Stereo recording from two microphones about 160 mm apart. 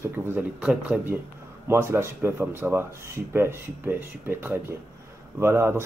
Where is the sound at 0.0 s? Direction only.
15° right (ahead or behind).